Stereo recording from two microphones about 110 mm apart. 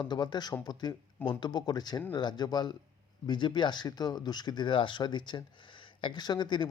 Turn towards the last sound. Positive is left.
turn(degrees=45)  # may be behind; listen again after turning